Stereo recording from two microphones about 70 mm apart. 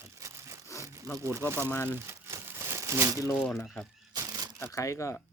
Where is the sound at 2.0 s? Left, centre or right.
Right.